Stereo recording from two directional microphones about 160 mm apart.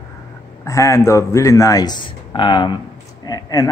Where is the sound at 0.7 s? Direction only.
20° left (ahead or behind).